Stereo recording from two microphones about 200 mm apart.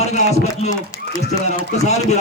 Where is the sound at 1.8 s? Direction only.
35° left (ahead or behind).